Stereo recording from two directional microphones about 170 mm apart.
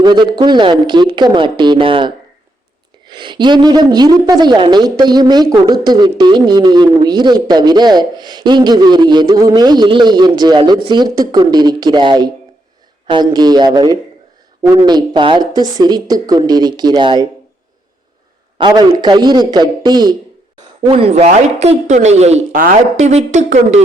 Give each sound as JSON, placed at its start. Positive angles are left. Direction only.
{"t": 0.0, "sound": "a woman's voice", "side_deg": -25}
{"t": 18.5, "sound": "a woman's voice", "side_deg": -25}